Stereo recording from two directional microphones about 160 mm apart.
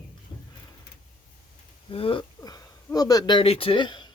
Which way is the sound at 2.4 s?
20° left (ahead or behind).